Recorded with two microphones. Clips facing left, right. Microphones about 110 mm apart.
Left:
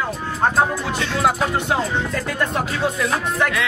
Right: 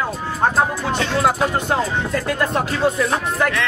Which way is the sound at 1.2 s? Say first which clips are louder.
Even; centre (ahead or behind).